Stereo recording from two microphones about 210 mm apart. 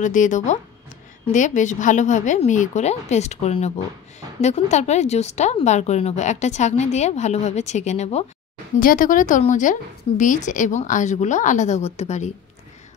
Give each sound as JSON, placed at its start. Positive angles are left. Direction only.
{"t": 0.0, "sound": "speech", "side_deg": 35}
{"t": 8.7, "sound": "speech", "side_deg": 40}